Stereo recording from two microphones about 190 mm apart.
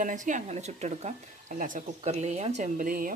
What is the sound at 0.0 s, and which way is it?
A woman's voice, 40° right (ahead or behind).